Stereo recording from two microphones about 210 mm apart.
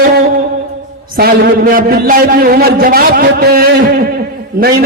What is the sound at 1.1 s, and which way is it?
A man's voice, 45° right (ahead or behind).